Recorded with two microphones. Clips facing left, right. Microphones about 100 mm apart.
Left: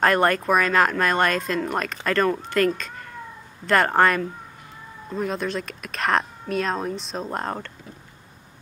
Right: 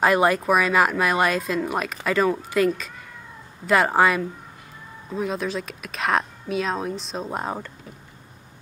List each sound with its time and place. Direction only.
0.0 s speech: 5° right (ahead or behind)